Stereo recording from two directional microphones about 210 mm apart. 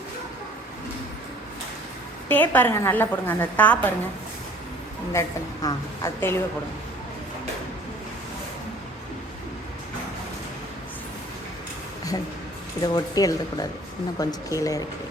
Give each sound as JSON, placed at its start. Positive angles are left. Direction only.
{"t": 2.3, "sound": "a woman's voice", "side_deg": 10}
{"t": 5.6, "sound": "a woman's voice", "side_deg": 15}
{"t": 12.8, "sound": "a woman's voice", "side_deg": 20}